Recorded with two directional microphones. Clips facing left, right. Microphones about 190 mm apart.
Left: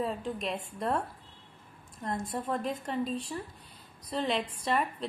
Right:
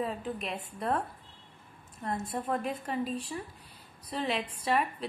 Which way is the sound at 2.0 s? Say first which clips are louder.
Even; 5° right (ahead or behind).